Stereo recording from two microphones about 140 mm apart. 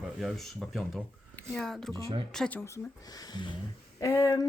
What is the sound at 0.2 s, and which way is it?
Speech, centre (ahead or behind).